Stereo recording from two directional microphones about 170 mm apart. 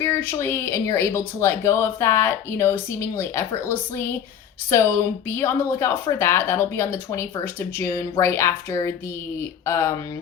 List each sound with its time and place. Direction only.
0.0 s speech: 15° left (ahead or behind)